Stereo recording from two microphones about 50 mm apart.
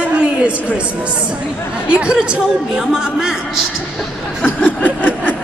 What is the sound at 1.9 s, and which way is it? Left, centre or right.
Speech, right.